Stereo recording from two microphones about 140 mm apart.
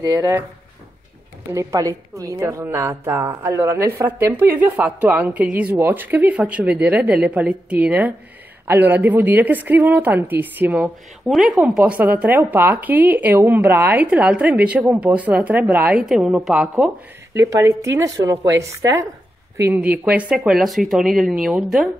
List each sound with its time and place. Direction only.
0.0 s a woman's voice: 15° right (ahead or behind)
1.5 s a woman's voice: 20° right (ahead or behind); by 16.9 s 5° right (ahead or behind)
17.3 s a woman's voice: 20° right (ahead or behind); by 21.8 s centre (ahead or behind)